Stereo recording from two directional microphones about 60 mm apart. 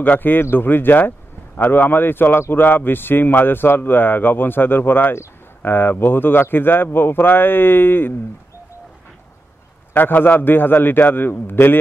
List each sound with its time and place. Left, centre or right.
0.0 s speech: left
9.9 s speech: left